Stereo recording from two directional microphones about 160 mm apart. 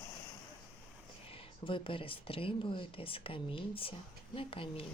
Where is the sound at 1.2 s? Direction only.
35° left (ahead or behind).